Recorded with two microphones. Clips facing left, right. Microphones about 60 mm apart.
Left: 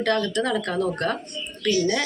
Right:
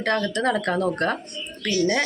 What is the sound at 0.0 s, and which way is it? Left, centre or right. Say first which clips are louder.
Speech: even; right.